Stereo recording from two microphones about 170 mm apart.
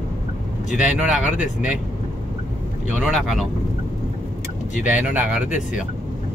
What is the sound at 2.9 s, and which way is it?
Speech, centre (ahead or behind).